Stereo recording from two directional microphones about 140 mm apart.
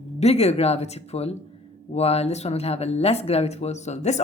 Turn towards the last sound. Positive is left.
turn(degrees=55)  # may be behind; listen again after turning